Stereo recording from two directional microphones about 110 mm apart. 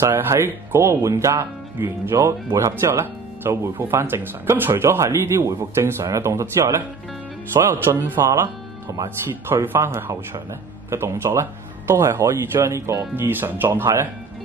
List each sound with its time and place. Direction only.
0.0 s speech: 25° right (ahead or behind)